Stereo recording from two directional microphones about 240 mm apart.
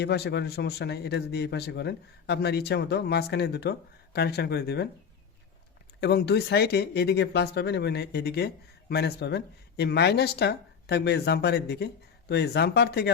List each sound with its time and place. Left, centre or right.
0.0 s a man's voice: left
6.0 s a man's voice: left